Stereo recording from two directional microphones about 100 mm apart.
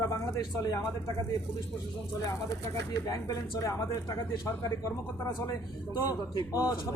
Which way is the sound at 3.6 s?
30° left (ahead or behind).